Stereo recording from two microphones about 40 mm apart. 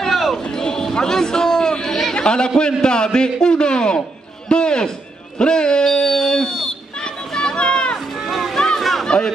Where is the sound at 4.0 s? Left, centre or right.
Left.